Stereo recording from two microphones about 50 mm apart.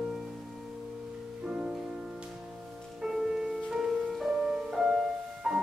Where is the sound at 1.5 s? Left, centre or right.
Centre.